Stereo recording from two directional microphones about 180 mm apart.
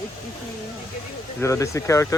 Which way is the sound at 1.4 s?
15° left (ahead or behind).